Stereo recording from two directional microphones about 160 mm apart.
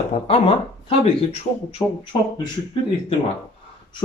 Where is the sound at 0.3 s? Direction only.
35° left (ahead or behind).